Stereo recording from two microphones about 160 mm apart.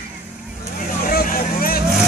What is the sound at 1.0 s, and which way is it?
Vehicle, 65° left (ahead or behind).